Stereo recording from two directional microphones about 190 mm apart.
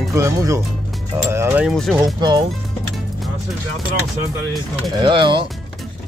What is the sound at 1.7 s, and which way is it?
Speech, centre (ahead or behind).